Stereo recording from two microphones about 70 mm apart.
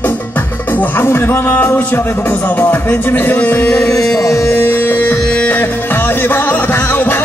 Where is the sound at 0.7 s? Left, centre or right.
Left.